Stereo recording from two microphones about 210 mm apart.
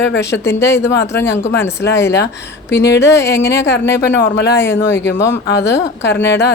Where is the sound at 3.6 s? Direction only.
55° left (ahead or behind).